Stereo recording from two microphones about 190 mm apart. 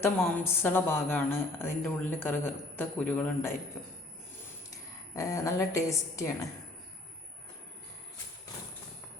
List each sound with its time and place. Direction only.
0.0 s a woman's voice: 10° left (ahead or behind)
5.1 s a woman's voice: 15° left (ahead or behind)